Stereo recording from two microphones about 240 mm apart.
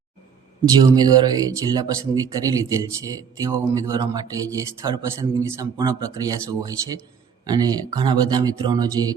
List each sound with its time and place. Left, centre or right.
0.8 s speech: centre